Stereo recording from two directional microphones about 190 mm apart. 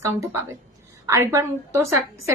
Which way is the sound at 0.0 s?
15° right (ahead or behind).